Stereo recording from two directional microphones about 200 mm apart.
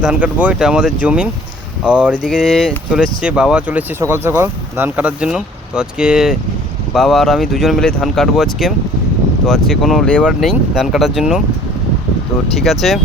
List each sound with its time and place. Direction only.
0.0 s speech: 5° right (ahead or behind)
12.5 s speech: centre (ahead or behind)